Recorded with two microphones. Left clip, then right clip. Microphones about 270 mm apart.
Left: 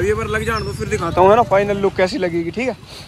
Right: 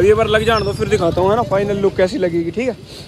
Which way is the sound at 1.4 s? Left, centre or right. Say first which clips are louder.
Left 1 dB; centre.